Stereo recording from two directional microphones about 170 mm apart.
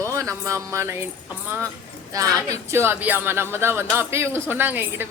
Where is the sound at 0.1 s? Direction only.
20° right (ahead or behind).